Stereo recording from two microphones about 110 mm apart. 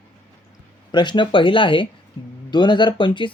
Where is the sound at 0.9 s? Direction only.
45° left (ahead or behind).